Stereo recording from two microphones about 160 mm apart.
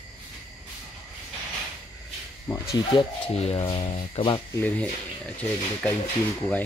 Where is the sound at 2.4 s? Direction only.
20° left (ahead or behind).